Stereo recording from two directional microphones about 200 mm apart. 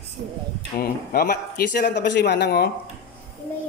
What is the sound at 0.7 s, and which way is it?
A man's voice, 50° left (ahead or behind).